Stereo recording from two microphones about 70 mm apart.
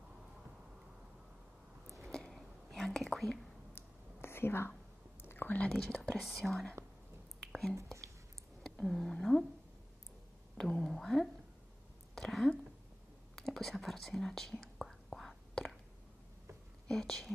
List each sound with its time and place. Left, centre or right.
2.0 s whispering: centre
3.7 s whispering: left
5.8 s speech: centre
6.2 s speech: centre
7.7 s speech: right
8.6 s speech: centre
10.6 s a sound: centre
13.4 s whispering: centre
16.8 s speech: centre